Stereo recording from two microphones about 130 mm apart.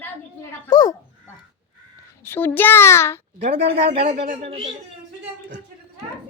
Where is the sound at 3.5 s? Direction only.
50° right (ahead or behind).